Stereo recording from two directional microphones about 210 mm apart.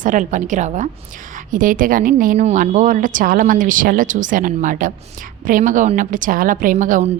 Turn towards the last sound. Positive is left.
turn(degrees=-35)  # may be behind; listen again after turning